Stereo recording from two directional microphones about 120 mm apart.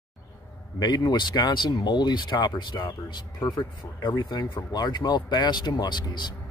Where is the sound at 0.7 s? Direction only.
35° left (ahead or behind).